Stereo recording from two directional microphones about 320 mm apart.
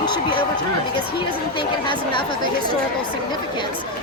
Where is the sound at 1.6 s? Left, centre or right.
Centre.